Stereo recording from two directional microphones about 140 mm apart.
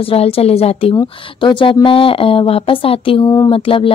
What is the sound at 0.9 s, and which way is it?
Speech, 35° left (ahead or behind).